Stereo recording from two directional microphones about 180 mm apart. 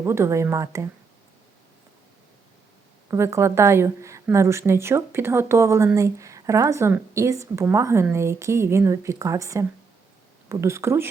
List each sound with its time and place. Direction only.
0.0 s a woman's voice: 15° right (ahead or behind)
3.1 s a woman's voice: 15° right (ahead or behind)